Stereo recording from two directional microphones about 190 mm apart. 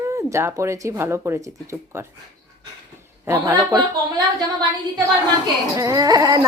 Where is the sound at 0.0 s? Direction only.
15° right (ahead or behind).